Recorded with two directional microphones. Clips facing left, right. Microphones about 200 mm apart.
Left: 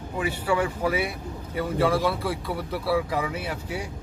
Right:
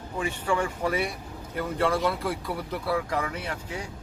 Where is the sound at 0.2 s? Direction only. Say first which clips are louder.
Left 2 dB; 10° left (ahead or behind).